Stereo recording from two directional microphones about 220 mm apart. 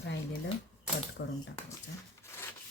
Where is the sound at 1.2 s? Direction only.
50° left (ahead or behind).